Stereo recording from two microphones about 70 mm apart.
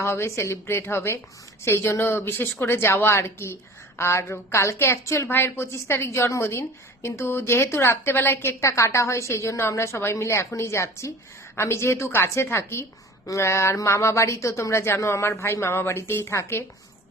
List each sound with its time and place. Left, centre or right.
0.0 s speech: left
8.6 s a woman's voice: left